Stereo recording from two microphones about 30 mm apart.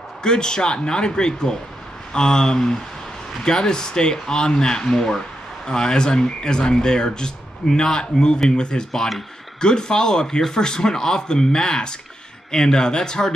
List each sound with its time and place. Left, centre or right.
0.2 s speech: left
4.8 s speech: centre
5.7 s speech: left